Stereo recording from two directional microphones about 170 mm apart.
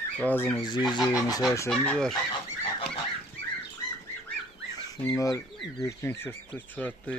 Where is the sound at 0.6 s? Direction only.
25° left (ahead or behind).